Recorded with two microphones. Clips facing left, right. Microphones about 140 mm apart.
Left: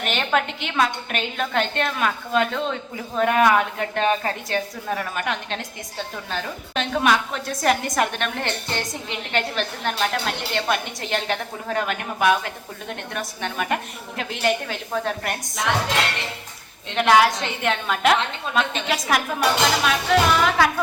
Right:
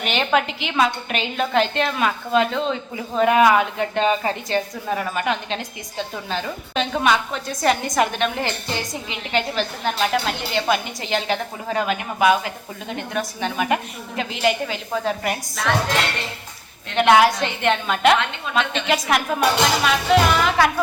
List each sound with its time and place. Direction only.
0.0 s a woman's voice: centre (ahead or behind)
16.9 s a woman's voice: centre (ahead or behind)